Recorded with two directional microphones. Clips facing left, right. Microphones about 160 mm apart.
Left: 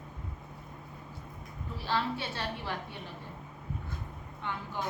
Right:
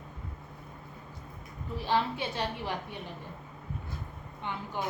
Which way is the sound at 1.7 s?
15° right (ahead or behind).